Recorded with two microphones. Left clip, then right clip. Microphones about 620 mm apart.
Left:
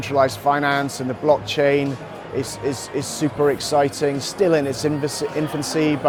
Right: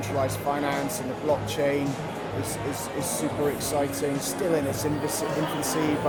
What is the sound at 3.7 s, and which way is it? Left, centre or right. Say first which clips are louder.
Speech: left 8 dB; left.